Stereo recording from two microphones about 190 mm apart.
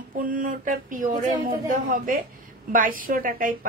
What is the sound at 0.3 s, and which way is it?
A woman's voice, 45° right (ahead or behind).